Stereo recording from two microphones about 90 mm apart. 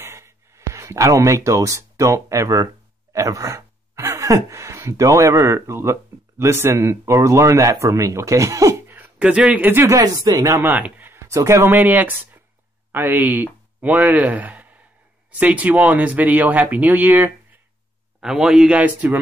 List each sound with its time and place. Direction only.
0.0 s speech: 30° right (ahead or behind)
9.2 s speech: 10° right (ahead or behind)
9.7 s speech: 25° right (ahead or behind)
9.9 s speech: 45° right (ahead or behind)
10.6 s speech: 20° right (ahead or behind)
11.2 s speech: 35° right (ahead or behind)
18.2 s speech: 5° right (ahead or behind)